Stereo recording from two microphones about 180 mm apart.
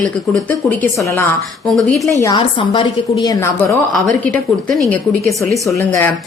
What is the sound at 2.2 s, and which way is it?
A woman's voice, 25° left (ahead or behind).